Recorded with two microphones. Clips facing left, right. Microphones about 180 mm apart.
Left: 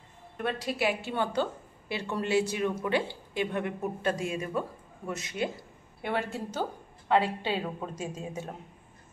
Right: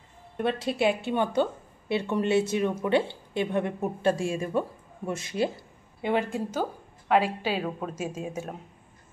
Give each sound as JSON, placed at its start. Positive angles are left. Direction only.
{"t": 0.4, "sound": "a woman's voice", "side_deg": -25}
{"t": 6.0, "sound": "a woman's voice", "side_deg": -15}